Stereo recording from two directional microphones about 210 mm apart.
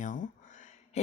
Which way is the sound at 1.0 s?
30° left (ahead or behind).